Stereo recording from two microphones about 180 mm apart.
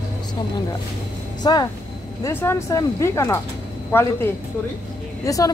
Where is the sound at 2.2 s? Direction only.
15° left (ahead or behind).